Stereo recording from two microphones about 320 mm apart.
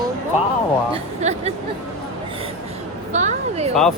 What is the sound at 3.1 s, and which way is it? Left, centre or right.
Speech, right.